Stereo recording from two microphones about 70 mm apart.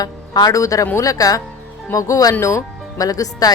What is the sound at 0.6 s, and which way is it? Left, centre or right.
Speech, left.